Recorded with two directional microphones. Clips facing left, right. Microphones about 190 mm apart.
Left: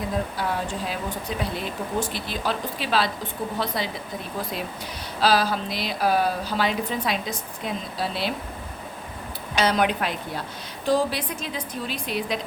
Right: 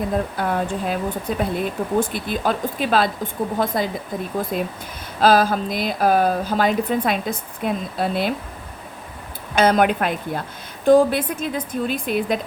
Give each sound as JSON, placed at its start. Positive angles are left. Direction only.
{"t": 0.3, "sound": "a woman's voice", "side_deg": -55}
{"t": 9.6, "sound": "a woman's voice", "side_deg": -50}